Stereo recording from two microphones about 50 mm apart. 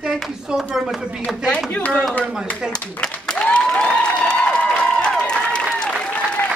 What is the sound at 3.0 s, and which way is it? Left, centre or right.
Applause, centre.